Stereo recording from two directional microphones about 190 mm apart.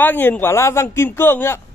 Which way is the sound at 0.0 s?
10° left (ahead or behind).